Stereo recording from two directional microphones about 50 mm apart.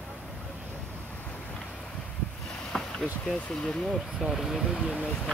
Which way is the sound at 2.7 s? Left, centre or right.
Centre.